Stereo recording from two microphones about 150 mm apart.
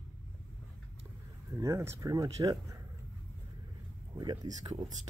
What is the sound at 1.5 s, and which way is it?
Speech, 20° right (ahead or behind).